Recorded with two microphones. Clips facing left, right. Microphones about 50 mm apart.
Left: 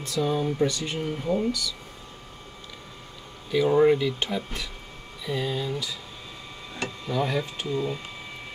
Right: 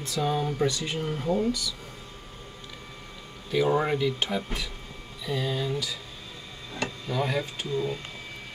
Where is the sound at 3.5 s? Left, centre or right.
Centre.